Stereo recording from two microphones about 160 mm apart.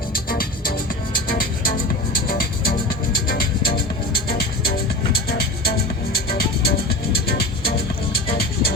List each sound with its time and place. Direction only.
0.3 s music: 65° left (ahead or behind)
4.3 s music: 80° left